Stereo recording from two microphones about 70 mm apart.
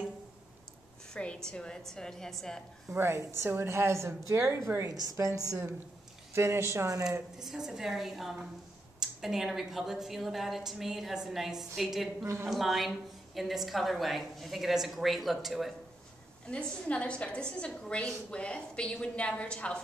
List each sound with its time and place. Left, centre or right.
1.1 s a woman's voice: centre
2.9 s a woman's voice: right
5.5 s a woman's voice: right
7.3 s a woman's voice: centre
16.4 s a woman's voice: centre